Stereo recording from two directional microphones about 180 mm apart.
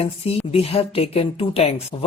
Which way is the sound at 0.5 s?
35° left (ahead or behind).